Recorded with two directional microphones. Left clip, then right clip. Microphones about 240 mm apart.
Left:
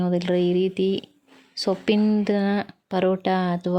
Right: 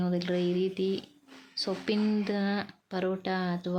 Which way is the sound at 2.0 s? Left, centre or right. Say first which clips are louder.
Left 8 dB; centre.